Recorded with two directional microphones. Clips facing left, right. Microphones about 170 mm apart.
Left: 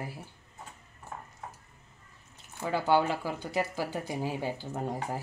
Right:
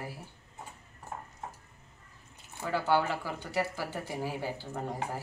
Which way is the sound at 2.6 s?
15° left (ahead or behind).